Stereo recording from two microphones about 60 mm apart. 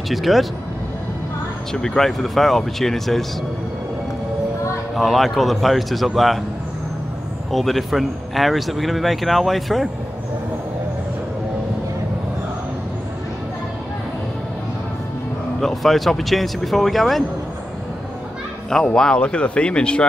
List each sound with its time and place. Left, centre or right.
0.1 s a man's voice: centre
1.7 s a man's voice: centre
4.9 s a man's voice: centre
7.5 s a man's voice: centre
15.6 s a man's voice: centre
18.7 s speech: centre